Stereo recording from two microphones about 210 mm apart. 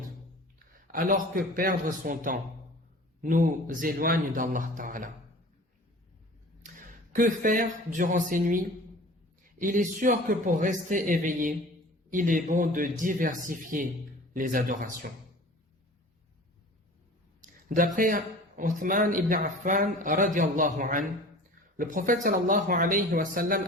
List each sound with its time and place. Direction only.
0.7 s speech: 40° right (ahead or behind)
6.6 s a sound: 40° right (ahead or behind)
7.9 s speech: 40° right (ahead or behind)
17.7 s speech: 40° right (ahead or behind)